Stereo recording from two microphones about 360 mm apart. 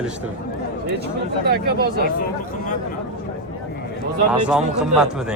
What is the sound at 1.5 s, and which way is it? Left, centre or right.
Speech, right.